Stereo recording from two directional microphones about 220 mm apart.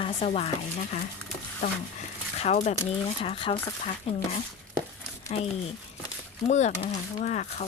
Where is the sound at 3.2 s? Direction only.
25° left (ahead or behind).